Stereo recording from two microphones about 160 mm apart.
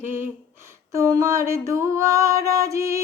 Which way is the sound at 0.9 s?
20° right (ahead or behind).